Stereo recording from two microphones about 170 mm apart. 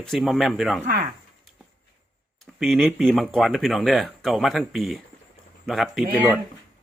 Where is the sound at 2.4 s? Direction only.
Centre (ahead or behind).